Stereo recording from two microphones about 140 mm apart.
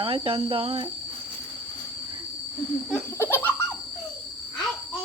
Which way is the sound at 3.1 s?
15° left (ahead or behind).